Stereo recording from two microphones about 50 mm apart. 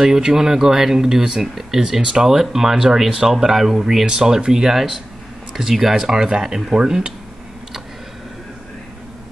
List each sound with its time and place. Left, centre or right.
0.0 s speech: centre